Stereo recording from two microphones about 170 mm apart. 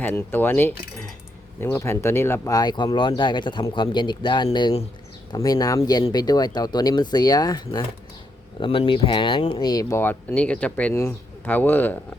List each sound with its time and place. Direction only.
0.0 s speech: 10° left (ahead or behind)